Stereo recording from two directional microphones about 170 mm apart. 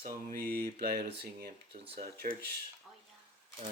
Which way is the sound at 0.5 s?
65° right (ahead or behind).